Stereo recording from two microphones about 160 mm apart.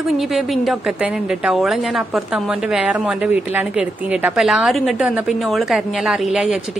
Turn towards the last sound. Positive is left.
turn(degrees=-5)  # may be behind; listen again after turning